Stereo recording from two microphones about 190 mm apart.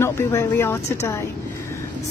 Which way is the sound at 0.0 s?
15° left (ahead or behind).